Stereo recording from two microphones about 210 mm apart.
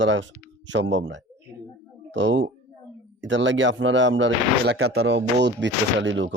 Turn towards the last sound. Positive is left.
turn(degrees=-60)  # may be behind; listen again after turning